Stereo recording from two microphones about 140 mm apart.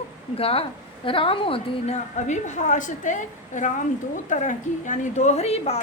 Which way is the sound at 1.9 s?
60° left (ahead or behind).